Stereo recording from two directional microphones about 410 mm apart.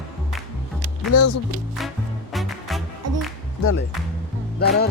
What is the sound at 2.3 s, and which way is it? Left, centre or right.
Music, centre.